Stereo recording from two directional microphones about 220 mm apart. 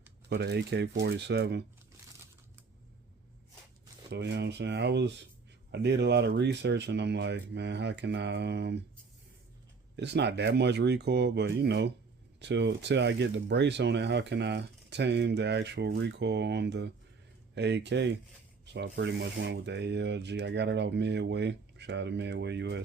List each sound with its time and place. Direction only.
0.3 s speech: 50° right (ahead or behind)
4.1 s speech: 50° right (ahead or behind)
9.9 s speech: 50° right (ahead or behind)